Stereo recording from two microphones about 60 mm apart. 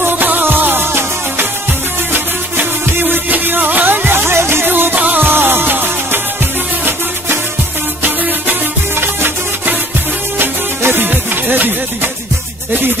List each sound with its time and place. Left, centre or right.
0.0 s music: right
9.0 s music: right